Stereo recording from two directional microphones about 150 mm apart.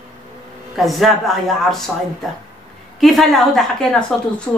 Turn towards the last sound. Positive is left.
turn(degrees=5)  # may be behind; listen again after turning